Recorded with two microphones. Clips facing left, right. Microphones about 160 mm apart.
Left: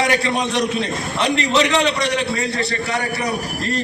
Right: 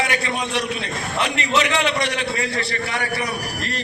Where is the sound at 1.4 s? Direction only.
35° left (ahead or behind).